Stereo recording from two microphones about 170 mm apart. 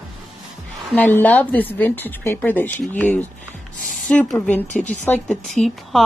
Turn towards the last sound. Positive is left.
turn(degrees=0)  # may be behind; listen again after turning